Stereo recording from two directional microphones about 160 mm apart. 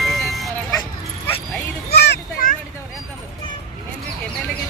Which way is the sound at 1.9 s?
90° left.